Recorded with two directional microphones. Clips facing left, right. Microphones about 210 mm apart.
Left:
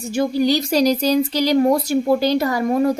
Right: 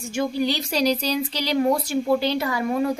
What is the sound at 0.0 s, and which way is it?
A woman's voice, 35° left (ahead or behind).